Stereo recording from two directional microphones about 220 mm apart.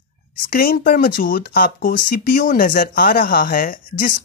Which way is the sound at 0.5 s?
40° left (ahead or behind).